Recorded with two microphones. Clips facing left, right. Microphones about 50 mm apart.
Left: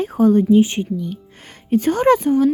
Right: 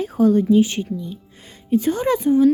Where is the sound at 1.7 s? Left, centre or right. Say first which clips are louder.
Left 4 dB; left.